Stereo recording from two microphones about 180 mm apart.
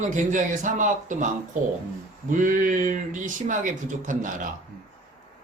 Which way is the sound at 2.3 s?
45° right (ahead or behind).